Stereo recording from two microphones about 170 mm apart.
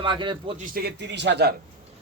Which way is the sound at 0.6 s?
60° right (ahead or behind).